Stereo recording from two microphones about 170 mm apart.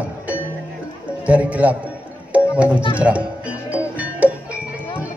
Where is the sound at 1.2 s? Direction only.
10° right (ahead or behind).